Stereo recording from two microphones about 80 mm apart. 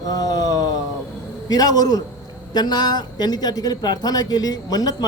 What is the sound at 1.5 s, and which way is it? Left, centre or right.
A man's voice, left.